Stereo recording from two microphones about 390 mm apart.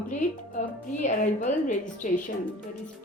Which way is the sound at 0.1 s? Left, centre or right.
Centre.